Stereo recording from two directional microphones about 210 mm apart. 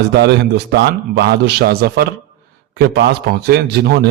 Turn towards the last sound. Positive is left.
turn(degrees=-50)  # may be behind; listen again after turning